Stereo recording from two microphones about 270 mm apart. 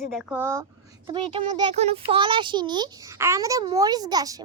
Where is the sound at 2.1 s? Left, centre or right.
Centre.